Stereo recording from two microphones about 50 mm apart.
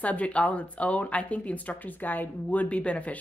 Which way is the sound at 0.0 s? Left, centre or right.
Left.